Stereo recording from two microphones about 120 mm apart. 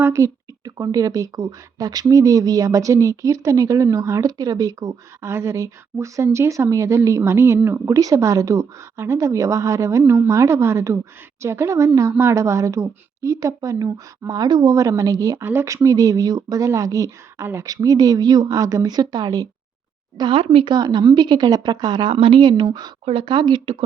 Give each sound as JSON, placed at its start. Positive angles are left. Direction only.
{"t": 0.0, "sound": "speech", "side_deg": -25}
{"t": 20.7, "sound": "a woman's voice", "side_deg": -35}
{"t": 23.0, "sound": "speech", "side_deg": -50}